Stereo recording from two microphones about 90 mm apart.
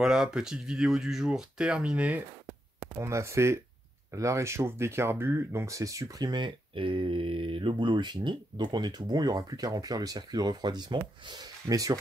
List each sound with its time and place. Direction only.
0.0 s speech: 5° right (ahead or behind)
2.8 s speech: 30° right (ahead or behind); by 6.5 s 50° right (ahead or behind)
6.7 s speech: 80° right; by 11.4 s 55° right (ahead or behind)
11.6 s speech: 40° right (ahead or behind)